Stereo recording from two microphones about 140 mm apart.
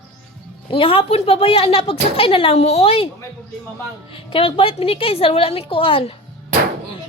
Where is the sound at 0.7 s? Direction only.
40° left (ahead or behind).